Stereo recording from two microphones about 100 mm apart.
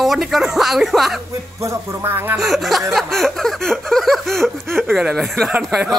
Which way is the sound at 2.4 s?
Centre (ahead or behind).